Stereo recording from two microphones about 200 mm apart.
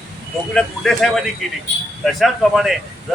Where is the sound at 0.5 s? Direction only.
Centre (ahead or behind).